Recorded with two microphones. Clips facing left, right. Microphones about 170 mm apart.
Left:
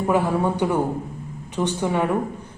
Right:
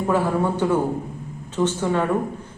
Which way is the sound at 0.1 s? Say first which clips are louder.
Even; 15° left (ahead or behind).